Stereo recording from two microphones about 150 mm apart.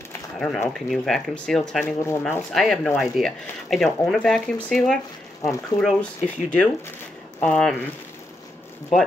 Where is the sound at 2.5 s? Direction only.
Centre (ahead or behind).